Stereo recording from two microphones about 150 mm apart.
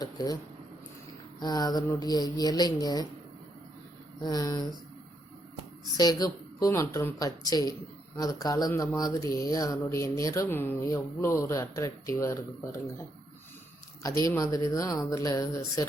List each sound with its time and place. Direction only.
0.0 s speech: 25° left (ahead or behind)
1.4 s speech: 25° left (ahead or behind)
4.2 s speech: 25° left (ahead or behind)
6.0 s speech: 25° left (ahead or behind)
14.3 s speech: 25° left (ahead or behind)